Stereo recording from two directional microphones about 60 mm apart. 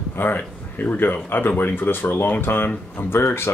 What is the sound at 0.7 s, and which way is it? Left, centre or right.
Speech, left.